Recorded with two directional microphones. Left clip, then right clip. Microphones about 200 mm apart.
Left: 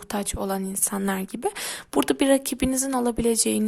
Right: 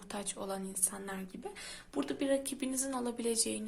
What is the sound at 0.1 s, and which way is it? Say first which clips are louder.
A woman's voice: left 12 dB; 40° left (ahead or behind).